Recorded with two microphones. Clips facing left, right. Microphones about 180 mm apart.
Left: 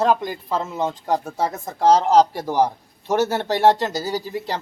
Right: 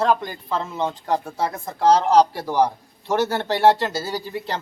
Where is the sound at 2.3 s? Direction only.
15° left (ahead or behind).